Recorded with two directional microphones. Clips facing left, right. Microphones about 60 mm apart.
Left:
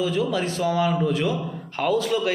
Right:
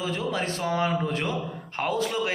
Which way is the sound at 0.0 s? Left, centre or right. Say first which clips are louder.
Left 5 dB; right.